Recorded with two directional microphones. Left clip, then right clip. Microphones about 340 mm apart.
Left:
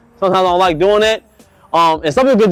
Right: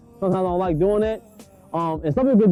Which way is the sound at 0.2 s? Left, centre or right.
Centre.